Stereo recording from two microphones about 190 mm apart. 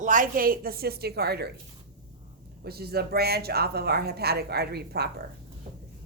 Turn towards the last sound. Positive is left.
turn(degrees=-55)  # may be behind; listen again after turning